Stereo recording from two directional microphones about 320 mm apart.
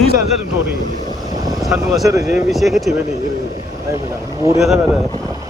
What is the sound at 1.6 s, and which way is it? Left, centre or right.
Speech, centre.